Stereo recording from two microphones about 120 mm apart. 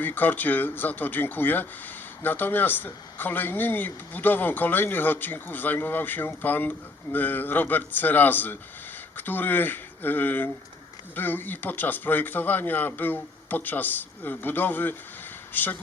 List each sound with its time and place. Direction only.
0.0 s speech: 15° left (ahead or behind)